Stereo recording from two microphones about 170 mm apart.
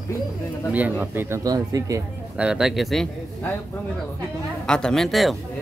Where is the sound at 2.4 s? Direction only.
5° right (ahead or behind).